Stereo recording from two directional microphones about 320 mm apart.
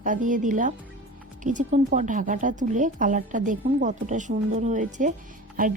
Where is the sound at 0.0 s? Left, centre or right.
Right.